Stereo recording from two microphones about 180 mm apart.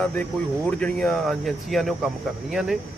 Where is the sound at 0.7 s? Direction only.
5° left (ahead or behind).